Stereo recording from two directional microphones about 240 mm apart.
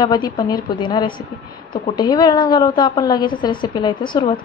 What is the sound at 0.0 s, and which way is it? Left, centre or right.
A woman's voice, centre.